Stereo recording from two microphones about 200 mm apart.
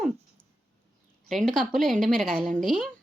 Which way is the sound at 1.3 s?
Centre (ahead or behind).